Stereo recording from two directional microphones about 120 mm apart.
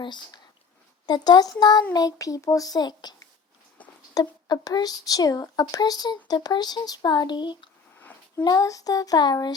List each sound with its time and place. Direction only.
0.0 s speech: 40° left (ahead or behind)
7.9 s a sound: 15° left (ahead or behind)
8.4 s speech: 30° left (ahead or behind)